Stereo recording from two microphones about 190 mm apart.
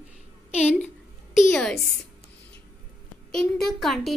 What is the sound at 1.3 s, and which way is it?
Speech, centre (ahead or behind).